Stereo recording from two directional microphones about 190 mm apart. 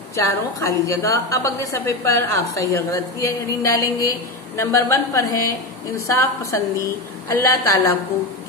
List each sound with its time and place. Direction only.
0.1 s a woman's voice: 15° left (ahead or behind)